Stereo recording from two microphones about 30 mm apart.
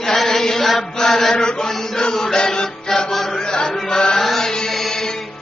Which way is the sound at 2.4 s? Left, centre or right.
Left.